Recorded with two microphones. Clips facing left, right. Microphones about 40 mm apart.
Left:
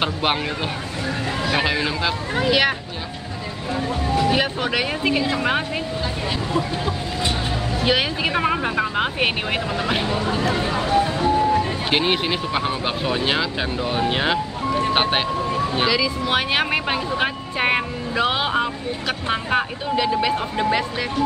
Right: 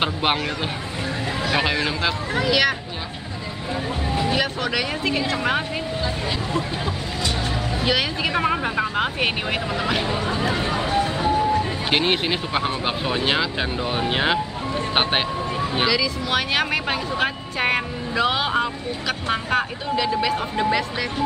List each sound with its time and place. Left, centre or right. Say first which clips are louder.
0.0 s speech: even; centre
1.4 s speech: even; centre
2.3 s speech: left 1 dB; centre
4.3 s speech: left 2 dB; centre
7.8 s speech: left 2 dB; centre
10.0 s speech: left 1 dB; centre
10.5 s vehicle: left 4 dB; centre
11.4 s speech: left 2 dB; centre
14.9 s vehicle: right 1 dB; centre
15.9 s speech: left 1 dB; centre